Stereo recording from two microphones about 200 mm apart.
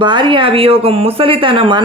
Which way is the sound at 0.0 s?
25° right (ahead or behind).